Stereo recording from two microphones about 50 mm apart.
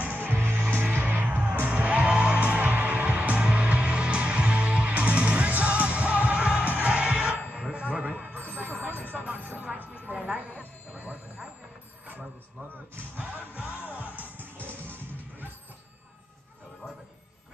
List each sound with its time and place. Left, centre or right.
0.0 s music: right
0.9 s music: right
7.7 s a sound: right
12.9 s music: right